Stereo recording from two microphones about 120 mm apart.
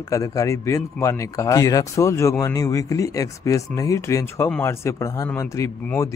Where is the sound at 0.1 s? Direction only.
30° left (ahead or behind).